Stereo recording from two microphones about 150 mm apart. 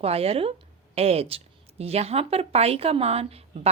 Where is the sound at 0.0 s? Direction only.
40° right (ahead or behind).